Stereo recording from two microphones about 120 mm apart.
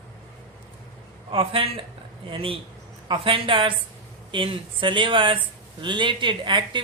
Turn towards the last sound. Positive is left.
turn(degrees=-40)  # may be behind; listen again after turning